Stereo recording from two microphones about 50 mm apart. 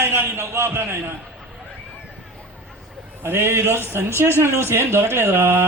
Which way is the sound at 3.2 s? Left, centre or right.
Right.